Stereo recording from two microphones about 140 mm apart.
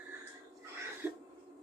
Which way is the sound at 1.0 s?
15° right (ahead or behind).